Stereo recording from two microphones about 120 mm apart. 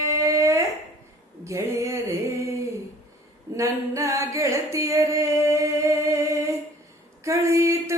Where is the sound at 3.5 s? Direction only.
25° right (ahead or behind).